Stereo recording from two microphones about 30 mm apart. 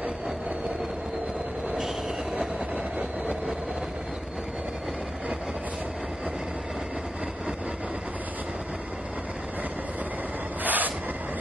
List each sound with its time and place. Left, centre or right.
10.6 s vehicle: right